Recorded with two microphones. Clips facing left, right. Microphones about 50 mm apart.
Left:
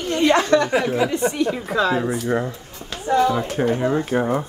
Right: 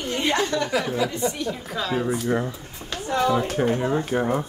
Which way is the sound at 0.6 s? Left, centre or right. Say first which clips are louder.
Left 4 dB; left.